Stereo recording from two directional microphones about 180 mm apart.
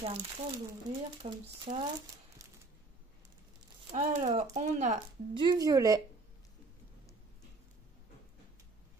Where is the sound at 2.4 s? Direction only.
20° right (ahead or behind).